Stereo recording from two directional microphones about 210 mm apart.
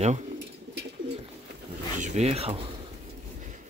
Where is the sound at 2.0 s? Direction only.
35° right (ahead or behind).